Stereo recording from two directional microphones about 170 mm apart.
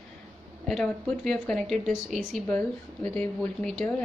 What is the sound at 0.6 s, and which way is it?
Speech, 5° left (ahead or behind).